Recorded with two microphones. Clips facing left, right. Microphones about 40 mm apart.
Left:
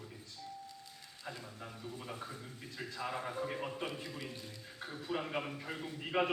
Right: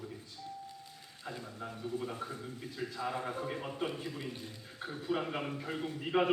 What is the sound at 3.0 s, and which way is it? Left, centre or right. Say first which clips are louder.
Speech: right 1 dB; centre.